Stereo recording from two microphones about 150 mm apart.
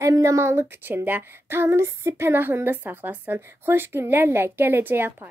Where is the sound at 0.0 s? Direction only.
20° right (ahead or behind).